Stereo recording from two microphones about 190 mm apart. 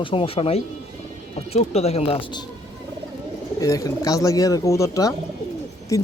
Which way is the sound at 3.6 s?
15° left (ahead or behind).